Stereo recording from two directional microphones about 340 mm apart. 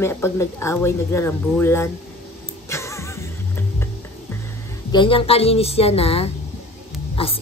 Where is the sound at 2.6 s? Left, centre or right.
Centre.